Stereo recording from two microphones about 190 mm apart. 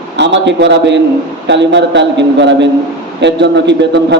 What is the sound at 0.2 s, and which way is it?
A man's voice, 65° right (ahead or behind).